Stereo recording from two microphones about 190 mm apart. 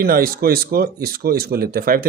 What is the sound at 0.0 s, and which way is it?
Speech, 50° right (ahead or behind).